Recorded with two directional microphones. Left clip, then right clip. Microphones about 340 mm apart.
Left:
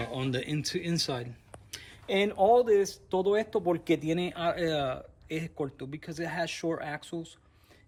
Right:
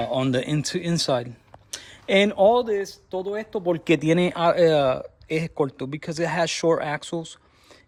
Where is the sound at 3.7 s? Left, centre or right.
Right.